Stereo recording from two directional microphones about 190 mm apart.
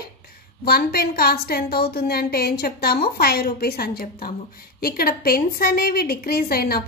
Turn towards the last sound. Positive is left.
turn(degrees=50)  # may be behind; listen again after turning